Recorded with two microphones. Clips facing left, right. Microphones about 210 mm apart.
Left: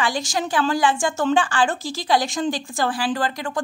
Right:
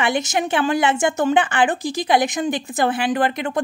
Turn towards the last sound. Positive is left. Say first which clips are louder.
# right 4 dB
turn(degrees=-20)  # may be behind; listen again after turning